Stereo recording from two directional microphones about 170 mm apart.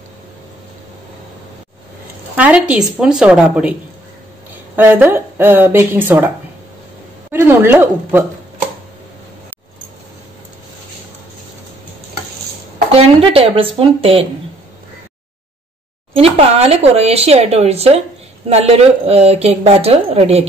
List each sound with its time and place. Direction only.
2.3 s speech: 5° right (ahead or behind)
4.7 s speech: 10° right (ahead or behind)
7.3 s speech: 15° right (ahead or behind)
12.9 s speech: 35° right (ahead or behind)
16.2 s speech: 35° right (ahead or behind)